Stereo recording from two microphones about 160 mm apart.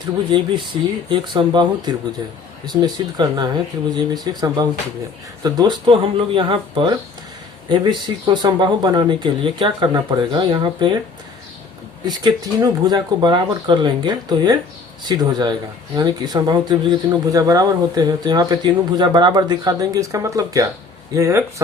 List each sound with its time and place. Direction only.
0.0 s speech: 30° right (ahead or behind)
12.0 s speech: 25° right (ahead or behind)